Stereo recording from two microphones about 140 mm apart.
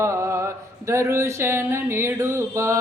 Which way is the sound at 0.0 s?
20° right (ahead or behind).